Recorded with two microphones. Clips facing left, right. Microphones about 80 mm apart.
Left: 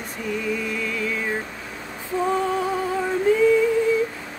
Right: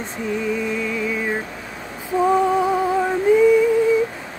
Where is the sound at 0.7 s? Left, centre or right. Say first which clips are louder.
Right 3 dB; centre.